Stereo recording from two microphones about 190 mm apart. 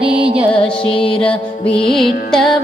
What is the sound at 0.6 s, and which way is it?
Music, 30° left (ahead or behind).